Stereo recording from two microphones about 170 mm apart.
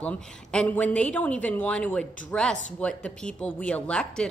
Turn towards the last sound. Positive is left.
turn(degrees=5)  # may be behind; listen again after turning